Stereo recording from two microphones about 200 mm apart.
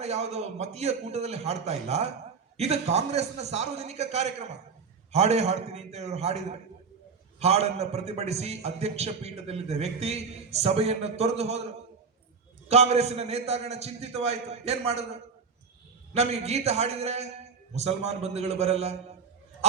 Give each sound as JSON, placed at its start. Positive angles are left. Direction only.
{"t": 0.0, "sound": "a man's voice", "side_deg": -35}
{"t": 12.6, "sound": "a man's voice", "side_deg": -35}